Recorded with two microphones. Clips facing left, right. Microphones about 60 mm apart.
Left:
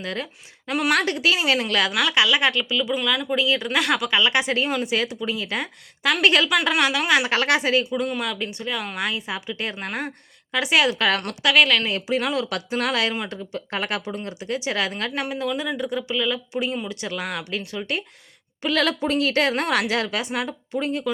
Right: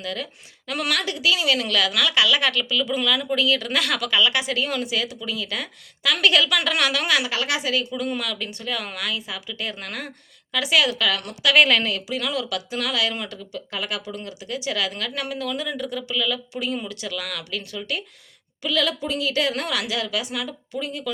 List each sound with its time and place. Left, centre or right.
0.0 s a woman's voice: left
0.9 s a woman's voice: left
6.7 s speech: centre
7.3 s speech: left
8.0 s speech: centre
9.0 s a woman's voice: left
11.5 s speech: centre
11.9 s a woman's voice: left
18.6 s a woman's voice: left